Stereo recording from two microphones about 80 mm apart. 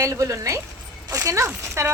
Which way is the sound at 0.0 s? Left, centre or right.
Right.